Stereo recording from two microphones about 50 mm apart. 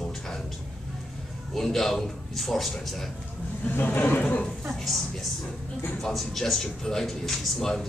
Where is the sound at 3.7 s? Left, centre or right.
Left.